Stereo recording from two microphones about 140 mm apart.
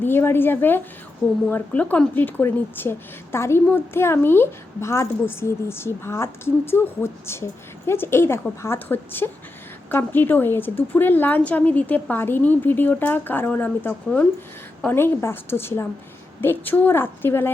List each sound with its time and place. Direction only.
0.0 s a woman's voice: 15° left (ahead or behind)